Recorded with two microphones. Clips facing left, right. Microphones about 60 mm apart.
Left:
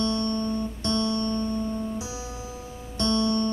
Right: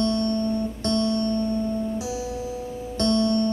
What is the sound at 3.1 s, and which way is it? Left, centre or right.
Music, left.